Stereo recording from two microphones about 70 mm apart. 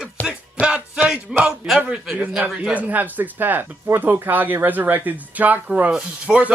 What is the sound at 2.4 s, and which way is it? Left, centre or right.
Speech, right.